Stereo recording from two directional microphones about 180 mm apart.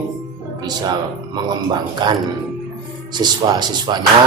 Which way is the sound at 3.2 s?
25° right (ahead or behind).